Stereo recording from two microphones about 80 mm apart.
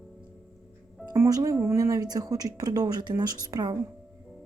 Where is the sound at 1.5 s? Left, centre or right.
Right.